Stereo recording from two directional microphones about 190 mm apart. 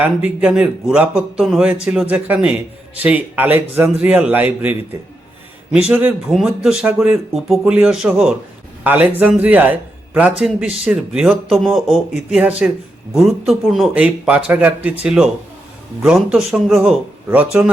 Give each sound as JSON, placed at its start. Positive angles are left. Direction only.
{"t": 0.0, "sound": "a man's voice", "side_deg": -5}